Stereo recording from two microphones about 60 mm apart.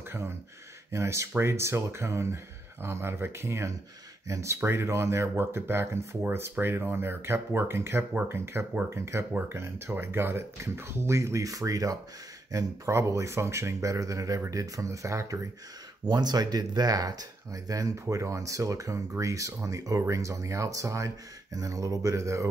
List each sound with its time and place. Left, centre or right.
0.9 s speech: right
4.6 s speech: right
16.0 s speech: right
16.3 s speech: right
18.1 s speech: right
20.0 s speech: right